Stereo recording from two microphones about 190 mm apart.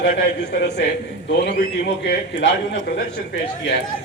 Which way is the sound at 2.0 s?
70° left (ahead or behind).